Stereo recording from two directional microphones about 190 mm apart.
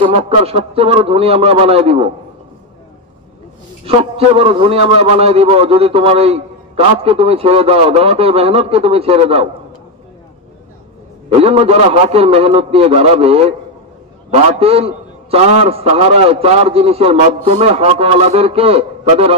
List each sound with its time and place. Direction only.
0.0 s a man's voice: 30° right (ahead or behind)
3.8 s a man's voice: 30° right (ahead or behind)
11.2 s a man's voice: 30° right (ahead or behind)